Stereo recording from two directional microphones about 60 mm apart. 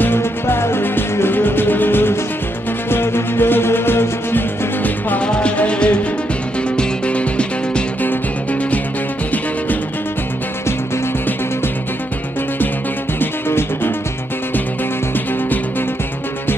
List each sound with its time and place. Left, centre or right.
0.0 s music: left
5.2 s music: centre
13.2 s music: left